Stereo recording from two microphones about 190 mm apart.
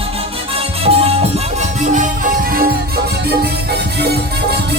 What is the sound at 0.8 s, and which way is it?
Music, 30° right (ahead or behind).